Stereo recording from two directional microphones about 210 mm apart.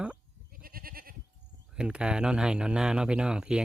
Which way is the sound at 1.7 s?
5° right (ahead or behind).